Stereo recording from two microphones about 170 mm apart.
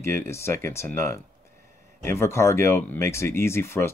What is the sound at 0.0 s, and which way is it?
Speech, 15° left (ahead or behind).